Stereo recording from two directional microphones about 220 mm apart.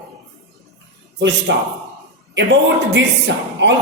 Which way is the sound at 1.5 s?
50° right (ahead or behind).